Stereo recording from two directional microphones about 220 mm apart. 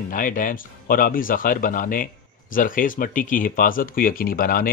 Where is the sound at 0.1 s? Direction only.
40° left (ahead or behind).